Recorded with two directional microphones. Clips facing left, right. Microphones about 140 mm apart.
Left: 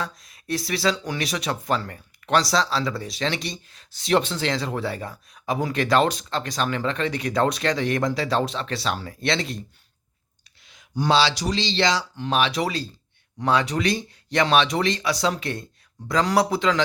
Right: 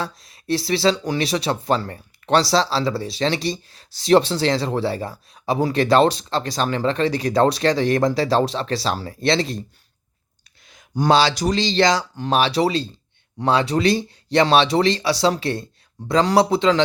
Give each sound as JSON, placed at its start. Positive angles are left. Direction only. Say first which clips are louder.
{"t": 0.0, "sound": "speech", "louder": "right 3 dB", "side_deg": -30}
{"t": 10.6, "sound": "speech", "louder": "right 4 dB", "side_deg": -45}